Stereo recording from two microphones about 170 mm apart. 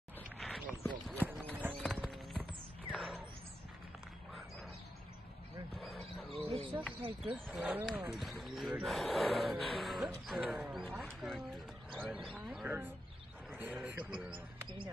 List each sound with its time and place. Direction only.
0.4 s a sound: centre (ahead or behind)
1.2 s clip-clop: 10° right (ahead or behind)
1.8 s clip-clop: centre (ahead or behind)
2.9 s a sound: centre (ahead or behind)
6.3 s cricket: 35° right (ahead or behind)
7.3 s speech: centre (ahead or behind)
13.8 s speech: 5° right (ahead or behind)
14.3 s speech: 30° right (ahead or behind)